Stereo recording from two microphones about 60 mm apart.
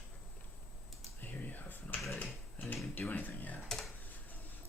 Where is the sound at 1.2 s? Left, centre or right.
Left.